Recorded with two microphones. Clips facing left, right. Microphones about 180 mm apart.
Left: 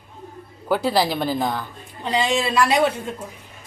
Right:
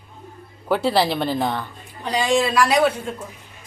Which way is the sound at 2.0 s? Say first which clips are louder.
Right 2 dB; 20° left (ahead or behind).